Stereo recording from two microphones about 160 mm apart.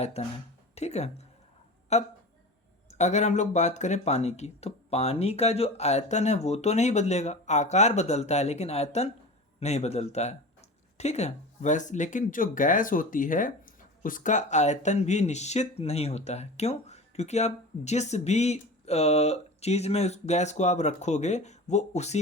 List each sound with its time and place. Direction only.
0.2 s speech: 40° left (ahead or behind)